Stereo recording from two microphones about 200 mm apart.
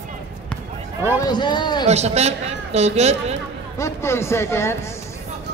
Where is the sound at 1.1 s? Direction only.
20° left (ahead or behind).